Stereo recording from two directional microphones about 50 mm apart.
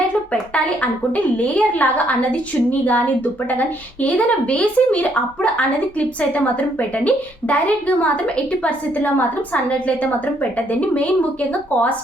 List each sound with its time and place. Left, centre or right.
0.5 s a woman's voice: left
9.6 s speech: left